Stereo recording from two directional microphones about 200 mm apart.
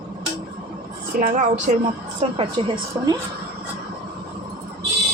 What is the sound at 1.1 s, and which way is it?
A woman's voice, 40° right (ahead or behind).